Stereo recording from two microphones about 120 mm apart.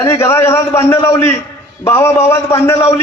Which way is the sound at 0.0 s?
25° left (ahead or behind).